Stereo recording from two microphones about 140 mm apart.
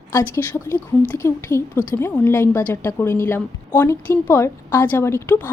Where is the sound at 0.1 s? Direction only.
20° left (ahead or behind).